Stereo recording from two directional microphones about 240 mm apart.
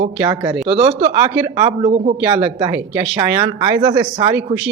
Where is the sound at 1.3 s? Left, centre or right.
Centre.